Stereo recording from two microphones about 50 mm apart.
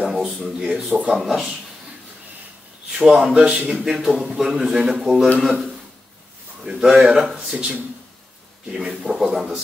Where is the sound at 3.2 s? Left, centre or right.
Centre.